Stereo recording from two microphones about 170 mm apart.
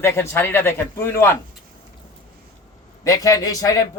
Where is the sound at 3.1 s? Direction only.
20° left (ahead or behind).